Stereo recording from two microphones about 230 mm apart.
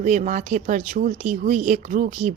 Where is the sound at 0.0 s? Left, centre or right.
Right.